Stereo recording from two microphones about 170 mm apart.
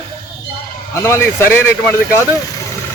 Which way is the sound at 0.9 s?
15° left (ahead or behind).